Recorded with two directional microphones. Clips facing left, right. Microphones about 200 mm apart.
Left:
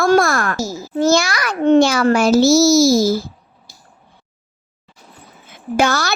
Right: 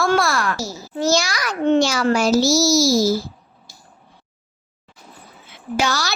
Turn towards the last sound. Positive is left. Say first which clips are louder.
# left 5 dB
turn(degrees=55)  # may be behind; listen again after turning